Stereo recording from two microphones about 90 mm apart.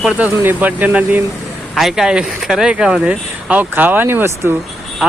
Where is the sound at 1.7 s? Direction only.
5° right (ahead or behind).